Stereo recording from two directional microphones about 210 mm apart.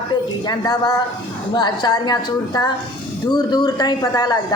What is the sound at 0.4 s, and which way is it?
A woman's voice, 20° left (ahead or behind).